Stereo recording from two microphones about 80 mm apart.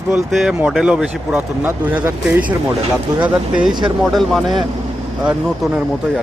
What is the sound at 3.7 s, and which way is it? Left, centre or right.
Speech, right.